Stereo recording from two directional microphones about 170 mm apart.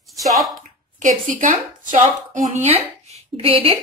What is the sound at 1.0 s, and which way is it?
A woman's voice, 50° right (ahead or behind).